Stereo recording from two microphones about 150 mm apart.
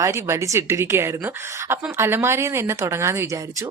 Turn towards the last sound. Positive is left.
turn(degrees=-20)  # may be behind; listen again after turning